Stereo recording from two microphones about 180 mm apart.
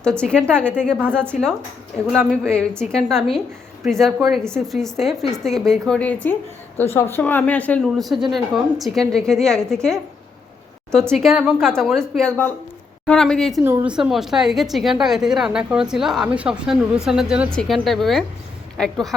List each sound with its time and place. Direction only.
0.0 s a woman's voice: 5° left (ahead or behind)